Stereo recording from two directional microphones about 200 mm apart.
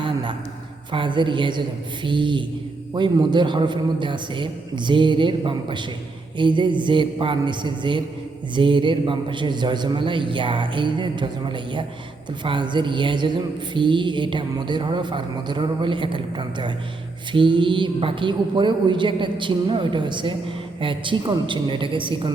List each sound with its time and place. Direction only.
0.9 s a man's voice: 25° right (ahead or behind)